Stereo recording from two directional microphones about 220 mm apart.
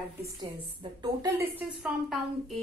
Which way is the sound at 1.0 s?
15° right (ahead or behind).